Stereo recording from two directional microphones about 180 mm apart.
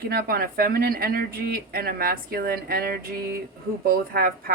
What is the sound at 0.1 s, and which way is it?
Speech, 55° right (ahead or behind).